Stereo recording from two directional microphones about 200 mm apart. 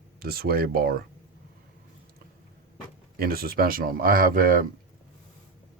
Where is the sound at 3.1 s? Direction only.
50° right (ahead or behind).